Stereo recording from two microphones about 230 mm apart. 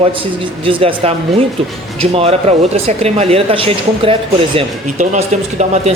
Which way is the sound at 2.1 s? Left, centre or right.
Right.